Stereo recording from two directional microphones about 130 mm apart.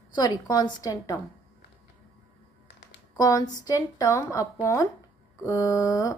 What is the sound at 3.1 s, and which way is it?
Speech, 30° left (ahead or behind).